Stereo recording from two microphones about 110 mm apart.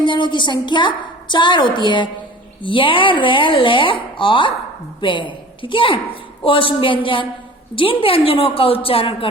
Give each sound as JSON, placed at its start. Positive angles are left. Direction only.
{"t": 0.0, "sound": "a woman's voice", "side_deg": 45}